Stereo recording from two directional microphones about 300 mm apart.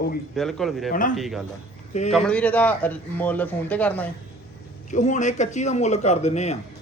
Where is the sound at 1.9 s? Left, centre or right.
Left.